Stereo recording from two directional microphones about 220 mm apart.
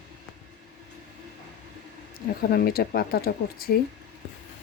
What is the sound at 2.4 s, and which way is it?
Speech, 45° left (ahead or behind).